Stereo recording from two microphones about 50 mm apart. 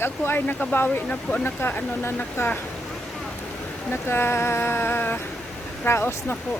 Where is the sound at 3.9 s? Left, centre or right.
Left.